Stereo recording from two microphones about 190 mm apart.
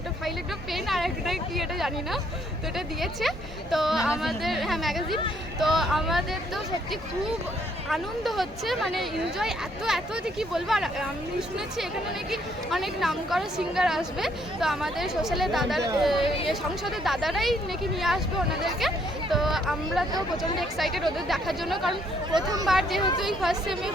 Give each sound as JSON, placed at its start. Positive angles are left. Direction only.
{"t": 0.3, "sound": "a sound", "side_deg": 0}
{"t": 2.7, "sound": "speech", "side_deg": 0}
{"t": 7.9, "sound": "speech", "side_deg": 0}
{"t": 16.2, "sound": "speech", "side_deg": 30}
{"t": 16.5, "sound": "speech", "side_deg": 0}
{"t": 22.3, "sound": "speech", "side_deg": -20}
{"t": 22.6, "sound": "speech", "side_deg": 0}